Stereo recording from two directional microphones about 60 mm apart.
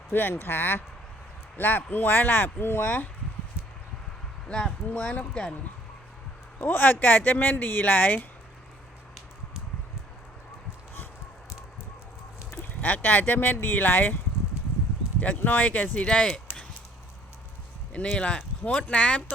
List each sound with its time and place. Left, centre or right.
0.1 s speech: left
4.4 s speech: centre
6.6 s speech: left
12.6 s speech: left
15.2 s speech: left
16.0 s speech: centre
18.2 s speech: centre